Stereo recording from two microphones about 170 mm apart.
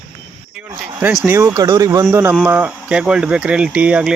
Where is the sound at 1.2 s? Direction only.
15° right (ahead or behind).